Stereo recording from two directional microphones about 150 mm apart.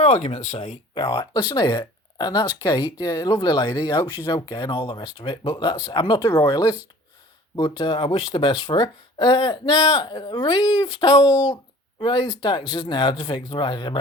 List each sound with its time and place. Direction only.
0.0 s speech: 45° left (ahead or behind)
0.9 s speech: 25° left (ahead or behind)